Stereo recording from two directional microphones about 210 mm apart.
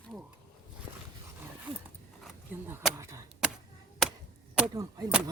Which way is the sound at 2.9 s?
15° right (ahead or behind).